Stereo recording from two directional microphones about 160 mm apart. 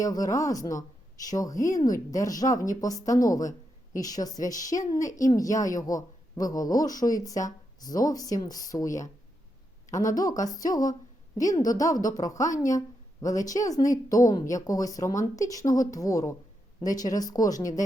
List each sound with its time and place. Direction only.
0.0 s a woman's voice: 20° left (ahead or behind)
10.1 s a woman's voice: 20° left (ahead or behind)